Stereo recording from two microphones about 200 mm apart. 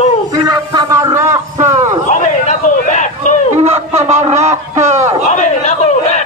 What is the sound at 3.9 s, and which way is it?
Speech, 35° right (ahead or behind).